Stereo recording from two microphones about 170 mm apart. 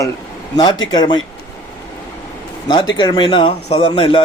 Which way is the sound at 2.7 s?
25° left (ahead or behind).